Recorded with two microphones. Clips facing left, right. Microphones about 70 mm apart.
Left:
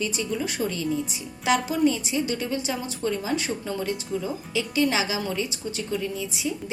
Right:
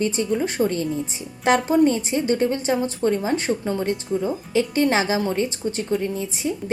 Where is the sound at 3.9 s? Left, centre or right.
Right.